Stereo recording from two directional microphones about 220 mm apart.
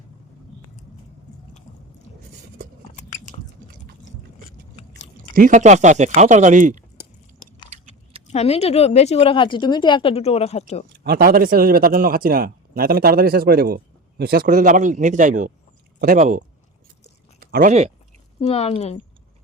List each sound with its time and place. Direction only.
2.9 s biting: 35° left (ahead or behind)
5.3 s speech: 40° right (ahead or behind)
8.3 s a woman's voice: 30° left (ahead or behind)
11.0 s speech: 45° right (ahead or behind)
17.4 s speech: 40° right (ahead or behind)
18.3 s a woman's voice: 30° left (ahead or behind)